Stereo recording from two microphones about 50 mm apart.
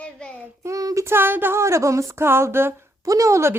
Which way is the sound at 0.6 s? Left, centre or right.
Right.